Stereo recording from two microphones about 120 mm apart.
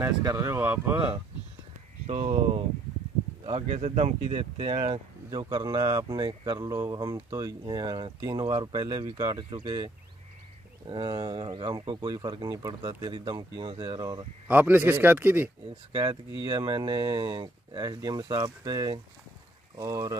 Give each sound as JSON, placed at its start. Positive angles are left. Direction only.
{"t": 0.2, "sound": "speech", "side_deg": -30}
{"t": 0.9, "sound": "speech", "side_deg": -45}
{"t": 2.0, "sound": "speech", "side_deg": -65}
{"t": 3.4, "sound": "speech", "side_deg": -55}
{"t": 5.3, "sound": "speech", "side_deg": -35}
{"t": 10.9, "sound": "speech", "side_deg": -35}
{"t": 14.5, "sound": "a man's voice", "side_deg": -15}
{"t": 15.9, "sound": "speech", "side_deg": -35}